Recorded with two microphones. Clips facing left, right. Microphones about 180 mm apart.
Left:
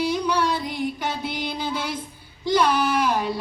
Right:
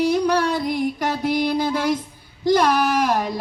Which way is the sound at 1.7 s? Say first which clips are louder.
Right 7 dB; 70° right (ahead or behind).